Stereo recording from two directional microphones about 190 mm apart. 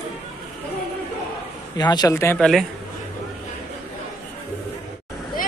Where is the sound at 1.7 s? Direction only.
20° left (ahead or behind).